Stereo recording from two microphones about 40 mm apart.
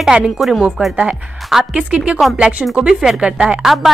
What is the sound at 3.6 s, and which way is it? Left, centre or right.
Speech, centre.